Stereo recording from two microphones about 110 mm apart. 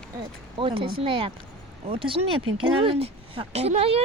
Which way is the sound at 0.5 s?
50° right (ahead or behind).